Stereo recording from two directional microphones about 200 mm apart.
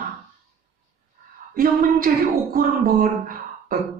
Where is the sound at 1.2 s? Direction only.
50° right (ahead or behind).